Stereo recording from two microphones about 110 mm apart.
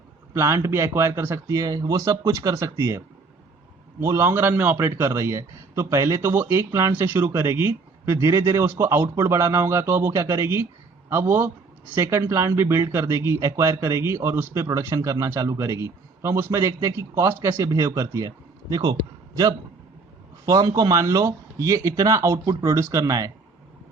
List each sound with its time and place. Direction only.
0.3 s speech: 25° right (ahead or behind)
4.0 s speech: 25° right (ahead or behind)
20.4 s speech: 30° right (ahead or behind)